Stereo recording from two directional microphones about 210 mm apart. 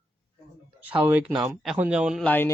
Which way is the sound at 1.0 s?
5° right (ahead or behind).